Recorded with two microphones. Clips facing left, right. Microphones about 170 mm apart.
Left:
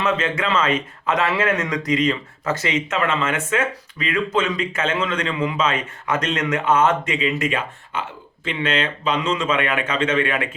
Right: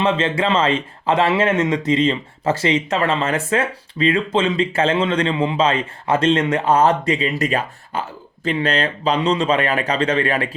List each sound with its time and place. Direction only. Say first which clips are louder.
0.0 s speech: right 3 dB; 30° right (ahead or behind)